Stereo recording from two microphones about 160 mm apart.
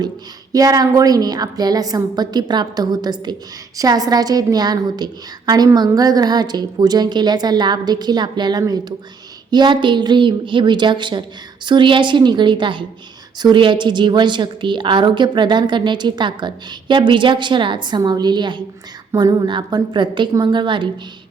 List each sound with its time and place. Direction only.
0.5 s a woman's voice: 25° right (ahead or behind)